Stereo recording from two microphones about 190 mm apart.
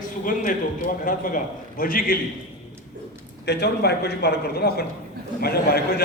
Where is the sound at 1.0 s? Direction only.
45° left (ahead or behind).